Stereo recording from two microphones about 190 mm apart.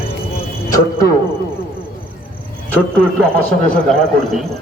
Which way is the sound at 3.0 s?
5° left (ahead or behind).